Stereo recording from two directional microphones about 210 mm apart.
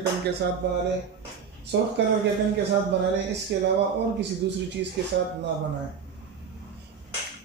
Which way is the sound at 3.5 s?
55° right (ahead or behind).